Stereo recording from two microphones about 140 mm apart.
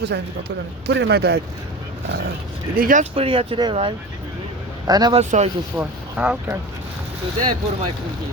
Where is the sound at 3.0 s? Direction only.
40° right (ahead or behind).